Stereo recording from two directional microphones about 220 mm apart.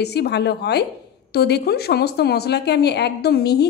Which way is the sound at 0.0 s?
50° left (ahead or behind).